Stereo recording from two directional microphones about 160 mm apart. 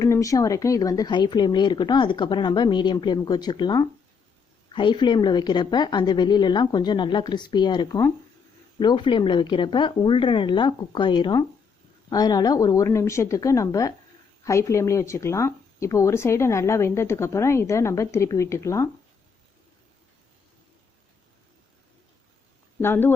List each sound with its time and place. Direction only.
0.0 s speech: 20° left (ahead or behind)
22.8 s speech: 15° left (ahead or behind)